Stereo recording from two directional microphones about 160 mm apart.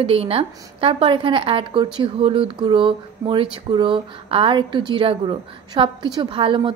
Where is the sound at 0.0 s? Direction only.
35° right (ahead or behind).